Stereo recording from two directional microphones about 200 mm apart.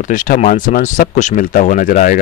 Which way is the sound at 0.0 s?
40° left (ahead or behind).